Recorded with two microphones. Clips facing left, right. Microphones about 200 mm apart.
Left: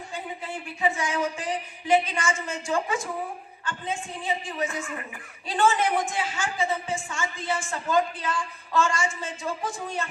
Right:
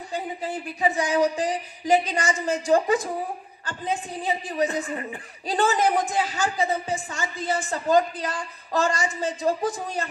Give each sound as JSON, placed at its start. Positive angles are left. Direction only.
{"t": 0.1, "sound": "a woman's voice", "side_deg": -40}